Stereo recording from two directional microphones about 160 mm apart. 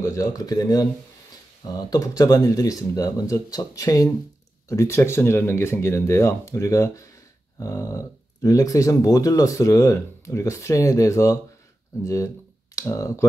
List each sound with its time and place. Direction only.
0.0 s speech: 20° left (ahead or behind)